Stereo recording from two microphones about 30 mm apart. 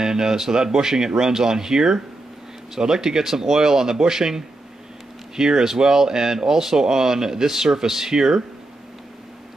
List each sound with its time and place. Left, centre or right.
0.0 s speech: right